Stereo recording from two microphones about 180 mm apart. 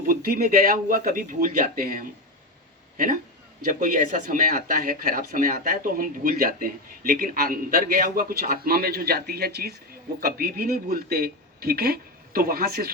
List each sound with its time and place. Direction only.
0.0 s speech: 50° right (ahead or behind)
3.7 s speech: 45° right (ahead or behind)